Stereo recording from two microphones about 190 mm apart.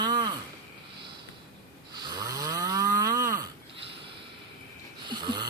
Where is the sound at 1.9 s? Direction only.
20° right (ahead or behind).